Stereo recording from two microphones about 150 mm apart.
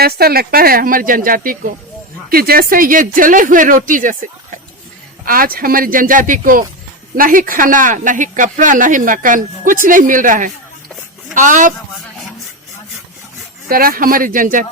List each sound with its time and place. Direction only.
0.0 s speech: 90° right; by 1.5 s 70° right (ahead or behind)
2.3 s speech: 85° right; by 4.2 s 60° right (ahead or behind)
5.2 s speech: 70° right (ahead or behind)
13.7 s speech: 75° right (ahead or behind)